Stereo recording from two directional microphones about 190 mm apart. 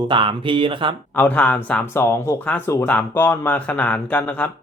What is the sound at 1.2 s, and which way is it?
Speech, 10° left (ahead or behind).